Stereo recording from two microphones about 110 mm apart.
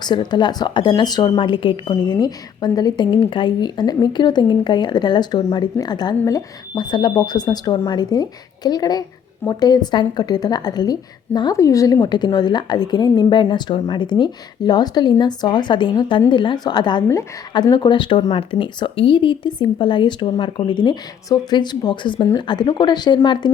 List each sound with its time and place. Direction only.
0.0 s speech: 40° left (ahead or behind)
2.1 s speech: 35° left (ahead or behind)